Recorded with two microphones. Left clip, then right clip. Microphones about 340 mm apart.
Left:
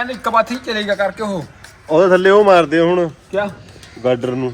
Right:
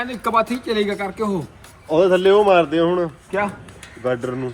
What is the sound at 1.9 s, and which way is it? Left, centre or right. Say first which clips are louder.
A man's voice: left 4 dB; left.